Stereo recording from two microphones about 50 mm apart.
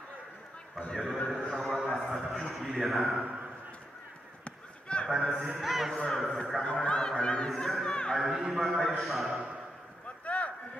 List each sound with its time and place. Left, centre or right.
0.7 s speech: centre
1.3 s a sound: centre
2.5 s speech: centre
4.5 s a sound: centre
5.6 s speech: centre
6.6 s speech: centre
7.4 s speech: centre
8.3 s a man's voice: centre
8.8 s speech: centre
10.2 s a sound: left